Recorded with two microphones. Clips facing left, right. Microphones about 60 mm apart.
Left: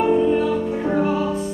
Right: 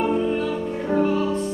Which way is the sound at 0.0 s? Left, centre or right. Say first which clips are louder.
Left 5 dB; centre.